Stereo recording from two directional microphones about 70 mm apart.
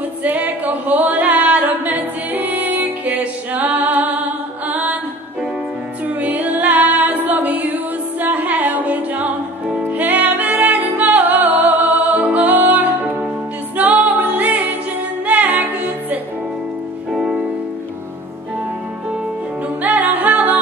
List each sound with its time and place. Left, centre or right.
0.2 s a capella: right
6.0 s music: right
17.1 s music: centre
19.8 s music: right